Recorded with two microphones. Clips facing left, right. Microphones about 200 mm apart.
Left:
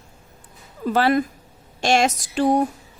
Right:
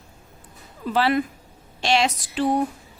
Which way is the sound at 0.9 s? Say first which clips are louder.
Left 2 dB; 45° left (ahead or behind).